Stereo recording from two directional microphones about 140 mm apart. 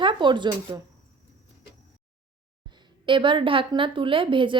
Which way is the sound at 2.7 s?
35° right (ahead or behind).